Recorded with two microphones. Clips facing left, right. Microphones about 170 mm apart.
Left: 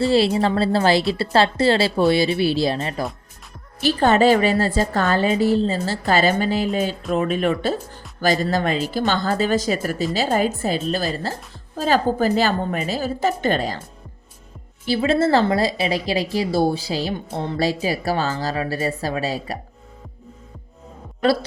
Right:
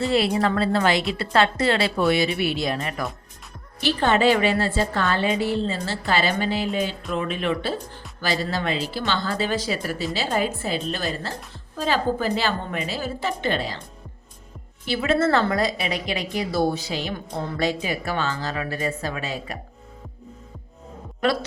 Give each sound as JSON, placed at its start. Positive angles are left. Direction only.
{"t": 0.0, "sound": "a woman's voice", "side_deg": 30}
{"t": 3.8, "sound": "a woman's voice", "side_deg": 40}
{"t": 14.8, "sound": "a woman's voice", "side_deg": 30}